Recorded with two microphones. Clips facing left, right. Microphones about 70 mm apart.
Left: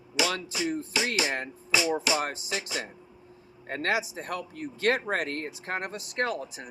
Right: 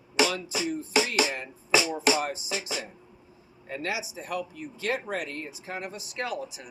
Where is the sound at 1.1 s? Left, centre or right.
Left.